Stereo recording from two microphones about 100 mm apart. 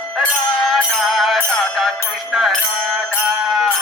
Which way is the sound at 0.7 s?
Centre (ahead or behind).